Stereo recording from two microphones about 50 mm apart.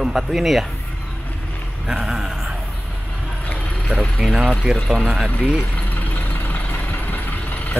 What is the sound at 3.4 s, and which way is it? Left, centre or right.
Clip-clop, left.